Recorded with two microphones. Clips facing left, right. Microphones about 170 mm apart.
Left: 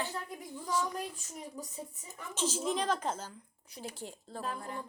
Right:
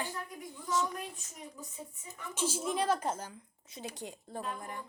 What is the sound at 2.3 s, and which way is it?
A woman's voice, 10° right (ahead or behind).